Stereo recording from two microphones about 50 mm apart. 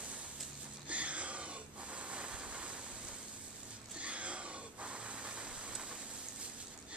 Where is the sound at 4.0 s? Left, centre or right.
Right.